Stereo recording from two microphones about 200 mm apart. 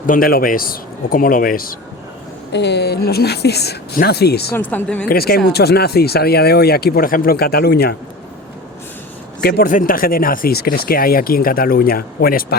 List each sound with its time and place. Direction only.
0.1 s speech: 45° left (ahead or behind)
2.5 s speech: 55° left (ahead or behind)
4.5 s speech: 10° left (ahead or behind)
5.0 s speech: 50° left (ahead or behind)
9.4 s speech: 50° left (ahead or behind)